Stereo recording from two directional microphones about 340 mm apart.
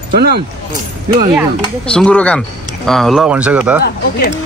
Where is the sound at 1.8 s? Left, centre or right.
Centre.